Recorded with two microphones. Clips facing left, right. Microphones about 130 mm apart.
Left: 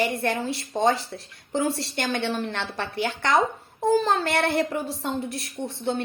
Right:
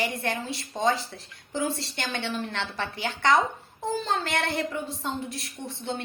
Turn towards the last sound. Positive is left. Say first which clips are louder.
# left 6 dB
turn(degrees=60)  # may be behind; listen again after turning